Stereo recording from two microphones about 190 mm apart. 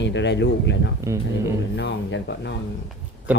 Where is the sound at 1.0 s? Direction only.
15° right (ahead or behind).